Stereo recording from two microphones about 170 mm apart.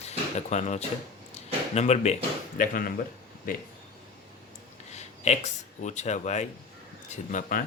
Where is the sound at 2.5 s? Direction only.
50° left (ahead or behind).